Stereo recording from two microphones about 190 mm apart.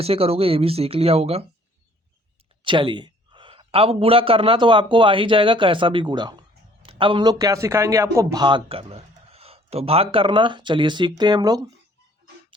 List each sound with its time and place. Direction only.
0.0 s speech: 30° right (ahead or behind)
2.6 s a man's voice: 25° right (ahead or behind)